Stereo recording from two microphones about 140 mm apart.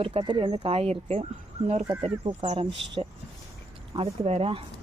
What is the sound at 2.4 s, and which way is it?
Speech, 50° right (ahead or behind).